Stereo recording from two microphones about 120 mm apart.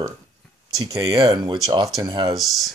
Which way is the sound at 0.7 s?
30° right (ahead or behind).